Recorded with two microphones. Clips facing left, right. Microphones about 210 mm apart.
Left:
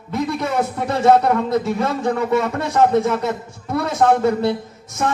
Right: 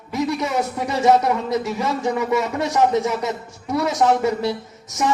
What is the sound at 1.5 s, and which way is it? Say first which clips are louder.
Speech: left 3 dB; 55° left (ahead or behind).